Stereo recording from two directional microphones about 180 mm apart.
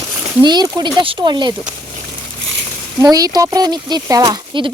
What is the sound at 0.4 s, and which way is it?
Speech, 20° right (ahead or behind).